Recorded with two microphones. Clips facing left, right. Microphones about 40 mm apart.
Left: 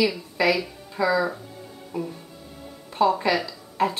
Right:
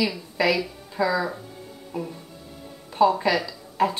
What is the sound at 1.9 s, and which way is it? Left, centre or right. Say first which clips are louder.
Speech: left 1 dB; centre.